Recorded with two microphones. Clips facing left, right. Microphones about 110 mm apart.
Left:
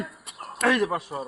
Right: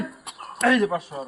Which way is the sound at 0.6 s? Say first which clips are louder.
Right 3 dB; 15° left (ahead or behind).